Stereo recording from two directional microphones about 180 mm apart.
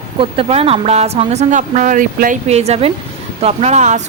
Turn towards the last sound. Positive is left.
turn(degrees=-40)  # may be behind; listen again after turning